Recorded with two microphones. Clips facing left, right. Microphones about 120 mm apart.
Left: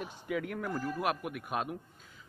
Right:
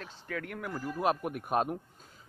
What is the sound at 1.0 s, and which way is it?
Speech, 35° right (ahead or behind).